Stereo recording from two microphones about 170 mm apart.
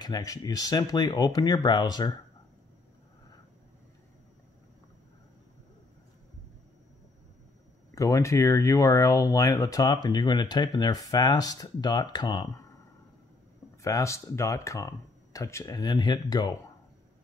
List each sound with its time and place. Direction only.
0.0 s speech: 20° left (ahead or behind)
7.9 s speech: 20° left (ahead or behind)
13.8 s speech: 15° left (ahead or behind)